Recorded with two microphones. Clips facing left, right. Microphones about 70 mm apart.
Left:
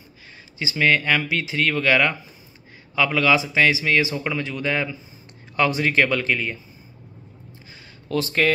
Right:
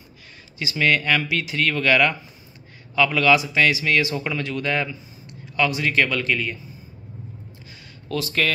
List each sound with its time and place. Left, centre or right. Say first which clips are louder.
0.6 s speech: left 1 dB; left
5.6 s speech: left 1 dB; left
8.1 s speech: left 3 dB; left